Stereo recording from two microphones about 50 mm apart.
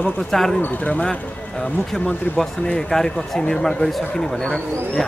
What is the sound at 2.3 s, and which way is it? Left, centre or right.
Speech, left.